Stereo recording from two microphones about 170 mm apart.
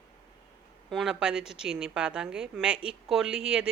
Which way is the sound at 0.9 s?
5° right (ahead or behind).